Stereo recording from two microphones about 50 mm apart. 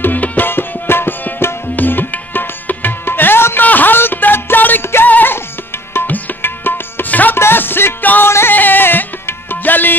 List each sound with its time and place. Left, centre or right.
0.0 s tabla: left
1.8 s music: left
6.0 s tabla: left
7.3 s music: left
8.3 s music: left
8.5 s music: left